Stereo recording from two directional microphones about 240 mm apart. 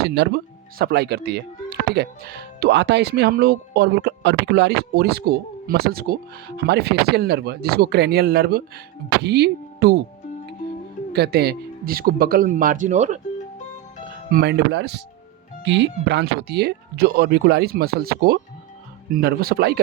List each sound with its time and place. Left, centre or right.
0.0 s speech: right
11.1 s speech: right
14.3 s speech: right